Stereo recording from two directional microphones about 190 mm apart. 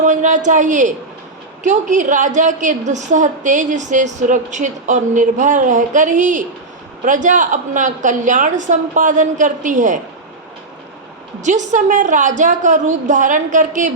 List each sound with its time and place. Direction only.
0.0 s a woman's voice: 40° right (ahead or behind)
11.3 s a woman's voice: 40° right (ahead or behind)